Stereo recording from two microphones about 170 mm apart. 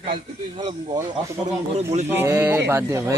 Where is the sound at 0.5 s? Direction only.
30° right (ahead or behind).